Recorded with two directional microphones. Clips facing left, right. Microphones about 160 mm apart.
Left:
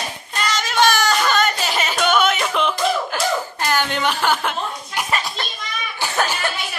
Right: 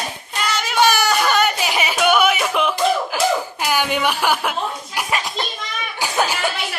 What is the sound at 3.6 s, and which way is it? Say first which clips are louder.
Chuckle: right 1 dB; 10° right (ahead or behind).